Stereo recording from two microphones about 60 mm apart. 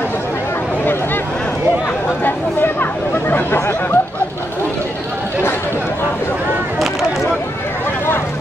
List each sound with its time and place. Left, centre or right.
2.2 s chatter: left